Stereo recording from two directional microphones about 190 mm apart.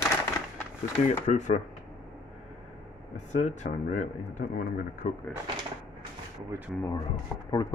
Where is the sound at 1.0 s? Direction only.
40° left (ahead or behind).